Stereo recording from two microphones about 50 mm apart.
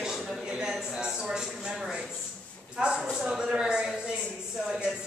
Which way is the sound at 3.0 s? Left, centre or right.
Centre.